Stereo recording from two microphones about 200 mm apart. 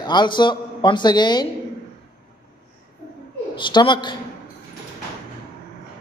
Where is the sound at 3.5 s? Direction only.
25° left (ahead or behind).